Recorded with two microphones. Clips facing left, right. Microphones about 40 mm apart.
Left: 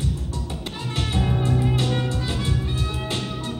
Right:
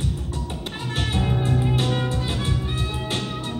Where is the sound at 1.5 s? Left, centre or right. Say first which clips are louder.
Even; centre.